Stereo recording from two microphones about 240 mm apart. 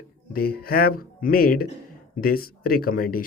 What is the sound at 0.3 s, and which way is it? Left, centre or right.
Speech, left.